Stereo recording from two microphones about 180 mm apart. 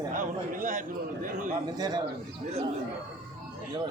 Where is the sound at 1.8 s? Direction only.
20° right (ahead or behind).